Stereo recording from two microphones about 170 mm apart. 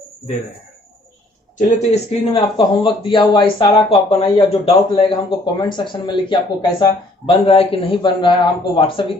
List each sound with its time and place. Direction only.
1.5 s a man's voice: 40° left (ahead or behind)
2.4 s a man's voice: 30° left (ahead or behind)